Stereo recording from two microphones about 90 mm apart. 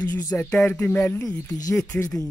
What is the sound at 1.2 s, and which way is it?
Speech, 40° left (ahead or behind).